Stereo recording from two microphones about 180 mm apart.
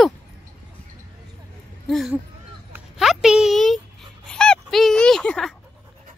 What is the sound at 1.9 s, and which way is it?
Speech, centre (ahead or behind).